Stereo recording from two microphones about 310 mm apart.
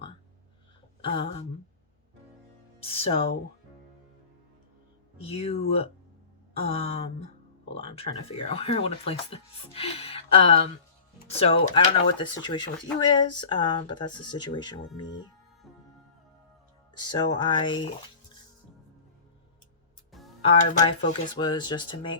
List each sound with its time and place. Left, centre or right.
1.0 s speech: centre
2.8 s speech: centre
5.2 s speech: centre
17.0 s speech: centre
20.4 s speech: centre